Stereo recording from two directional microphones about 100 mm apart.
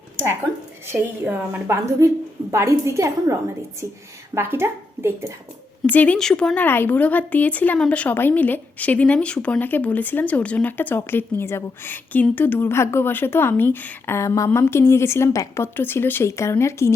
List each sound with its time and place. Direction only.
1.2 s speech: 20° right (ahead or behind)
4.4 s speech: 25° right (ahead or behind)
5.9 s speech: 15° left (ahead or behind)